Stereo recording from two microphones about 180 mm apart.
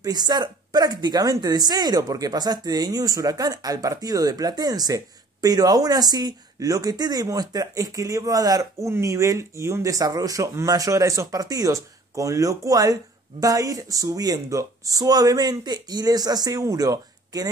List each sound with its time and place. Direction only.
0.0 s speech: 20° right (ahead or behind)